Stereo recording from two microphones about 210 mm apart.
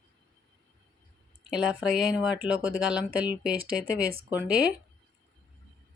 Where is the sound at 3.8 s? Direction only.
45° right (ahead or behind).